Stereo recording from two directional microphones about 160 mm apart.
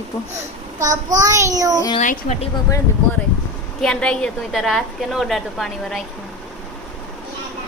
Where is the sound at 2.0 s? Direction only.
55° left (ahead or behind).